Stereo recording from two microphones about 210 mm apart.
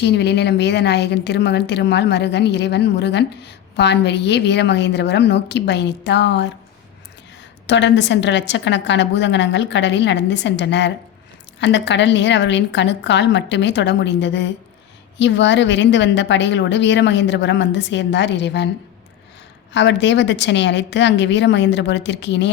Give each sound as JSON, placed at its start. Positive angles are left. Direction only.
{"t": 0.0, "sound": "a woman's voice", "side_deg": 55}
{"t": 7.7, "sound": "a woman's voice", "side_deg": 60}
{"t": 19.7, "sound": "a woman's voice", "side_deg": 60}